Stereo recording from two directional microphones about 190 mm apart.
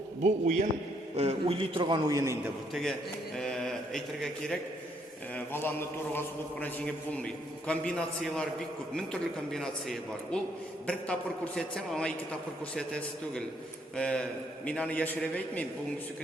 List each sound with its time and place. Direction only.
0.2 s a man's voice: 40° right (ahead or behind); by 2.3 s 20° right (ahead or behind)
3.3 s a man's voice: 5° left (ahead or behind)
9.5 s a man's voice: centre (ahead or behind)